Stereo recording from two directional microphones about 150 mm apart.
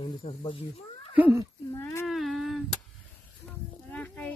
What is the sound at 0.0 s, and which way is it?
Speech, 45° left (ahead or behind).